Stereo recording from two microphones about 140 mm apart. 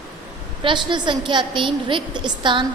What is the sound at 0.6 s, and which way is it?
A woman's voice, 35° right (ahead or behind).